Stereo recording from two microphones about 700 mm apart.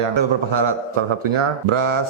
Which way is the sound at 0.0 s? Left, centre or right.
Right.